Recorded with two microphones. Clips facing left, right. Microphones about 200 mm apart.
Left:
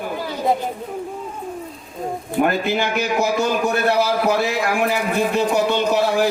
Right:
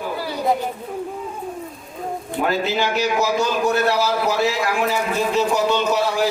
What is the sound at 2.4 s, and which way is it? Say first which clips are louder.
A man's voice: even; 55° left (ahead or behind).